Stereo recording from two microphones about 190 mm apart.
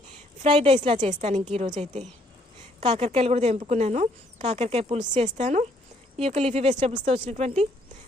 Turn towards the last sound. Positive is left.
turn(degrees=-35)  # may be behind; listen again after turning